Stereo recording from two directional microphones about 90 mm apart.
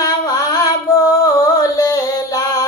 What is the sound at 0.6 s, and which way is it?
Female singing, 40° left (ahead or behind).